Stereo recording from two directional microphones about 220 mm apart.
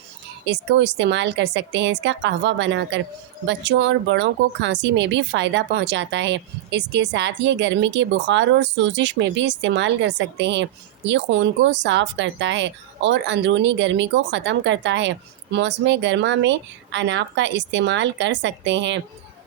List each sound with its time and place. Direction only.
0.4 s speech: 55° right (ahead or behind)